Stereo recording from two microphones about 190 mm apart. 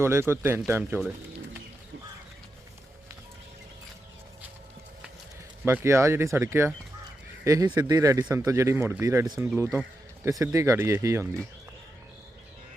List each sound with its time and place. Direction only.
0.0 s speech: 15° right (ahead or behind)
5.6 s speech: 15° right (ahead or behind)